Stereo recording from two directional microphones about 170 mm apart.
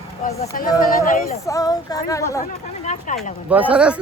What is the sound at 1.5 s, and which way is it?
Speech, 20° left (ahead or behind).